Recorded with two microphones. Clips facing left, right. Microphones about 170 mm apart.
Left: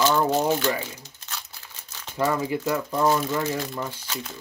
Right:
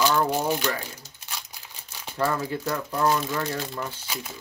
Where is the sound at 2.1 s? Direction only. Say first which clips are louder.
Left 2 dB; 10° left (ahead or behind).